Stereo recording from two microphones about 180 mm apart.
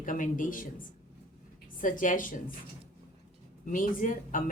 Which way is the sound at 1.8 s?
45° left (ahead or behind).